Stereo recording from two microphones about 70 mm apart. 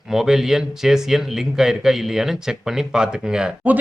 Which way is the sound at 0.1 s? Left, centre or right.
Centre.